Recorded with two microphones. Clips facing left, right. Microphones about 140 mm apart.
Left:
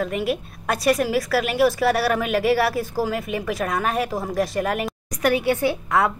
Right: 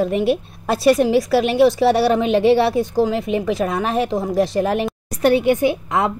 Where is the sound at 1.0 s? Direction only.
25° right (ahead or behind).